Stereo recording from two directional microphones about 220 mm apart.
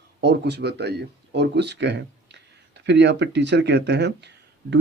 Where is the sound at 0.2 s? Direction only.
50° right (ahead or behind).